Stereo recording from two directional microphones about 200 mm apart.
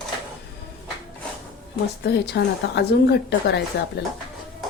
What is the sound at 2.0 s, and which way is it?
A woman's voice, 55° left (ahead or behind).